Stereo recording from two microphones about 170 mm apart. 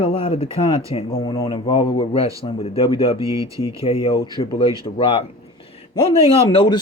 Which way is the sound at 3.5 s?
20° right (ahead or behind).